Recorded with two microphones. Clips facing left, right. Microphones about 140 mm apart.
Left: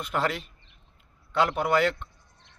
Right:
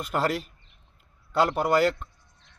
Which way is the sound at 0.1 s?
40° right (ahead or behind).